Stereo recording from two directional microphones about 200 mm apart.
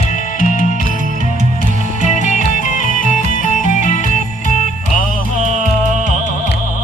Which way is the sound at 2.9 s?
40° right (ahead or behind).